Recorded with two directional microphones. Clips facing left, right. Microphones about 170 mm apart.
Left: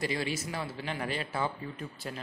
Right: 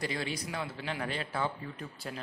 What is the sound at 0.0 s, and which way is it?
A man's voice, 5° left (ahead or behind).